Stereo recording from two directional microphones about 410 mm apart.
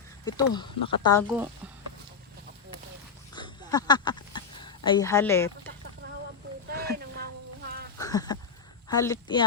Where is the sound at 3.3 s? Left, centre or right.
Centre.